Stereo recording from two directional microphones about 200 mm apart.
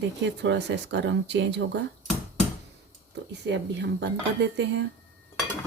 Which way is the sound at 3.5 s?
60° right (ahead or behind).